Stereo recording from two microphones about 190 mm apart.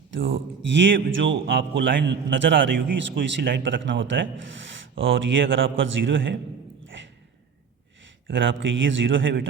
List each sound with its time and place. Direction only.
0.1 s a man's voice: 80° right
6.9 s a sound: 75° right (ahead or behind)
8.3 s a man's voice: 80° right